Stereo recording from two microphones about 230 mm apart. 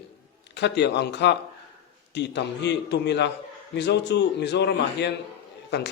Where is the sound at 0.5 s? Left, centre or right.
Left.